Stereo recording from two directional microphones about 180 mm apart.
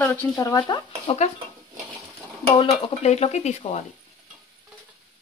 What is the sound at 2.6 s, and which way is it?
Speech, 30° left (ahead or behind).